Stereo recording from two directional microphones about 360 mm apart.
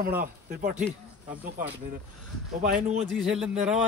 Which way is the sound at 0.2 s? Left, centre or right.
Right.